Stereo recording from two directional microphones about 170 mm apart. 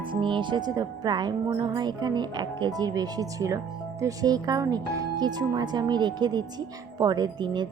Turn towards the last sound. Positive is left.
turn(degrees=-25)  # may be behind; listen again after turning